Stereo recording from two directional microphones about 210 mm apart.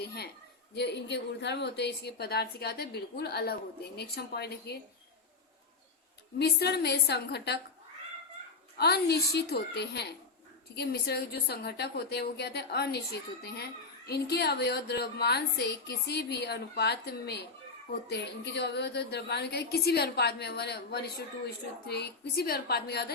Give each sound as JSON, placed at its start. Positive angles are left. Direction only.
{"t": 0.7, "sound": "a woman's voice", "side_deg": 55}
{"t": 6.4, "sound": "a woman's voice", "side_deg": 50}
{"t": 8.8, "sound": "a woman's voice", "side_deg": 50}